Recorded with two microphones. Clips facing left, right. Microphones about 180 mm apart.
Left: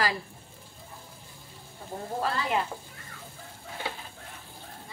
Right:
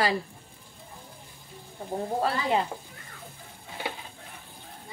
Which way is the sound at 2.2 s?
25° right (ahead or behind).